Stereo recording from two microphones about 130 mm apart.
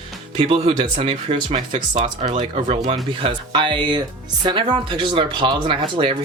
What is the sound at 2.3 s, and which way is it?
Speech, 45° right (ahead or behind).